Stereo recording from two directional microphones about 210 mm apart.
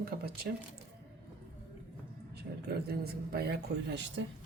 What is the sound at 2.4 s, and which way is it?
Speech, 50° right (ahead or behind).